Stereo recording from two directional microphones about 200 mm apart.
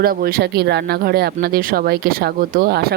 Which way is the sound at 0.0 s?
50° right (ahead or behind).